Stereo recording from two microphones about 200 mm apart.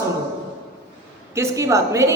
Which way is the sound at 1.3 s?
15° right (ahead or behind).